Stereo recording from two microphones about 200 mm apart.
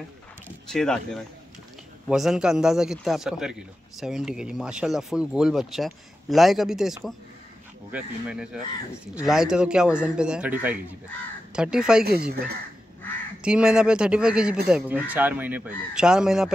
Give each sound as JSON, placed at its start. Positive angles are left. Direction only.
{"t": 0.7, "sound": "a man's voice", "side_deg": 5}
{"t": 12.0, "sound": "speech", "side_deg": -50}
{"t": 13.4, "sound": "a man's voice", "side_deg": -5}